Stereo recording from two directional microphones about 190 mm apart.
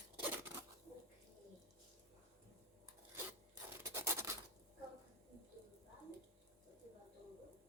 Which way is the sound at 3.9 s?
15° right (ahead or behind).